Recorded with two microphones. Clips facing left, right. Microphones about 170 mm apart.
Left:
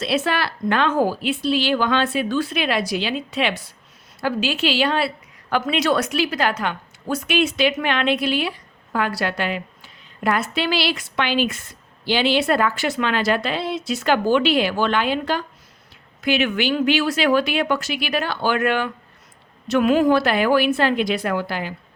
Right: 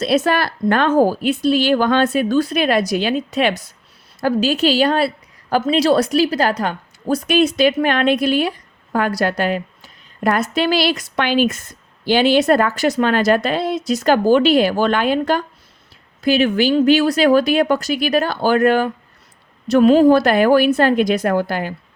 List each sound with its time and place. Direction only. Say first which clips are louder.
0.0 s a woman's voice: right 5 dB; 45° right (ahead or behind)
16.2 s a woman's voice: right 5 dB; 35° right (ahead or behind)